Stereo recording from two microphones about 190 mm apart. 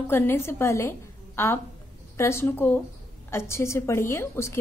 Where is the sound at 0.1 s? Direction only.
10° left (ahead or behind).